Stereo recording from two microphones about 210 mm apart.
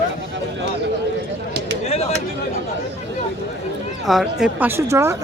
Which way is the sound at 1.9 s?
30° left (ahead or behind).